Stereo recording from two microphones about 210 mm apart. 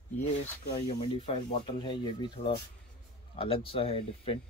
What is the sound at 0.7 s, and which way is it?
Speech, 25° left (ahead or behind).